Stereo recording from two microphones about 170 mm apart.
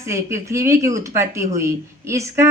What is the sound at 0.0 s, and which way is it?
Speech, 15° right (ahead or behind).